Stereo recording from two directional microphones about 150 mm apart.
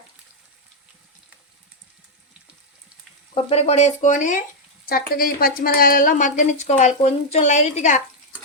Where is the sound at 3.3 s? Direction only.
45° left (ahead or behind).